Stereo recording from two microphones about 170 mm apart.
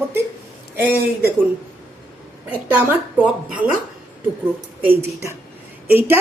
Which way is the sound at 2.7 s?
10° right (ahead or behind).